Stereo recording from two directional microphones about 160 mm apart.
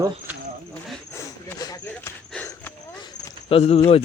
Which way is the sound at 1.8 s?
15° left (ahead or behind).